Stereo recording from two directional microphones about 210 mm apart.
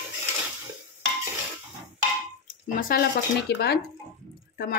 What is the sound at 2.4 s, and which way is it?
Speech, 45° left (ahead or behind).